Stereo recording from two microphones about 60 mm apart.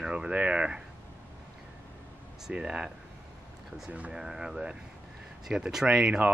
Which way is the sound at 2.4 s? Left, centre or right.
Centre.